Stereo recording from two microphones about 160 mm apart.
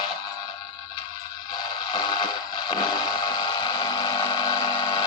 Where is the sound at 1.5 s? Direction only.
30° left (ahead or behind).